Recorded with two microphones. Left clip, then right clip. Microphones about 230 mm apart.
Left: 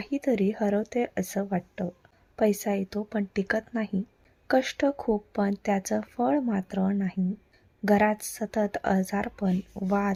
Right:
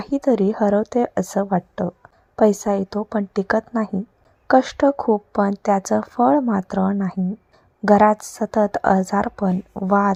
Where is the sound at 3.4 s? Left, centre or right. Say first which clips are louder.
Right 8 dB; centre.